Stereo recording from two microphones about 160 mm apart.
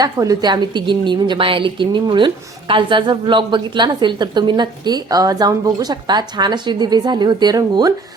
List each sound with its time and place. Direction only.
0.0 s a woman's voice: 25° right (ahead or behind)